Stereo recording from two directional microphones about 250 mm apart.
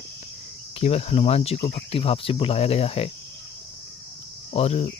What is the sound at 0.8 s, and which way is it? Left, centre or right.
Speech, left.